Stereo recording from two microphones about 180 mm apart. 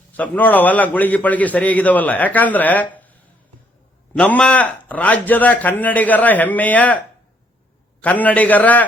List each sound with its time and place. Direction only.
0.2 s a man's voice: 10° left (ahead or behind)
8.0 s a man's voice: 10° left (ahead or behind)